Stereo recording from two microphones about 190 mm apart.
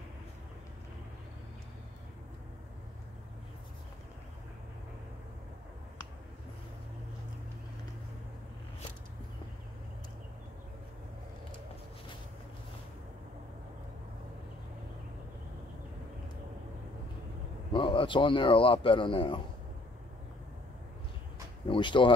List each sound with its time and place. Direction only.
17.7 s speech: 25° left (ahead or behind)
21.6 s speech: 25° left (ahead or behind)